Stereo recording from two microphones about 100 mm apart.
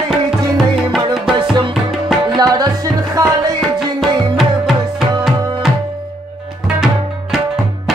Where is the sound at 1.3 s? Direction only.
55° right (ahead or behind).